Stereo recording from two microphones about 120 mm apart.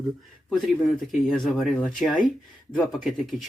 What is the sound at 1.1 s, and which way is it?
Speech, centre (ahead or behind).